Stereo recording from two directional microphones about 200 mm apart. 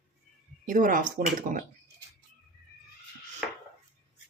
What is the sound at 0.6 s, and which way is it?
Speech, 40° right (ahead or behind).